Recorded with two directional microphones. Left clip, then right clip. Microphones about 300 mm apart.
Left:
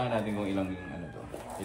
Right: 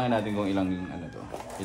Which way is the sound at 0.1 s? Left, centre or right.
Right.